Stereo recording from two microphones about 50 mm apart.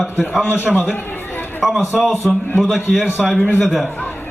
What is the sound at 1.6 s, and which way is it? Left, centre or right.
A man's voice, centre.